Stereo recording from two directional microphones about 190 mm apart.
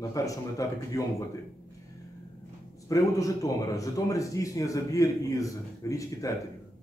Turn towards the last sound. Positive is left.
turn(degrees=15)  # may be behind; listen again after turning